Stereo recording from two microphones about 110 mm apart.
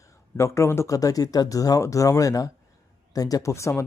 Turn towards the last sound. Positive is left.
turn(degrees=25)  # may be behind; listen again after turning